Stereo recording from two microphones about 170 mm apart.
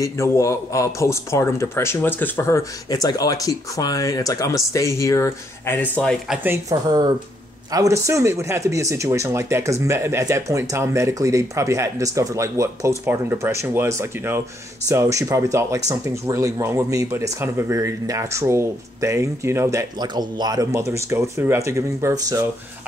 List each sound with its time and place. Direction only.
0.0 s a man's voice: 15° left (ahead or behind)
6.2 s speech: 5° right (ahead or behind)
6.5 s speech: 20° right (ahead or behind)